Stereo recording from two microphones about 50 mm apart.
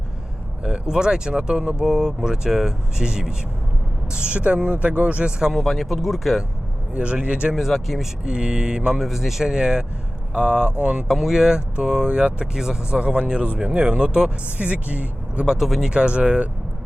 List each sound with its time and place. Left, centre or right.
0.6 s speech: centre
5.4 s speech: centre
6.9 s speech: right
7.5 s speech: centre
8.2 s speech: centre
9.0 s speech: centre; by 11.0 s right
11.1 s speech: centre; by 15.4 s right
15.4 s speech: centre
15.9 s speech: centre